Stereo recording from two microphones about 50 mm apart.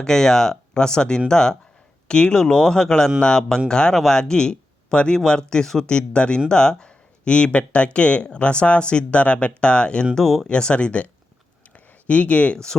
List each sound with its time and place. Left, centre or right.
0.0 s speech: centre
10.2 s speech: centre
10.5 s speech: centre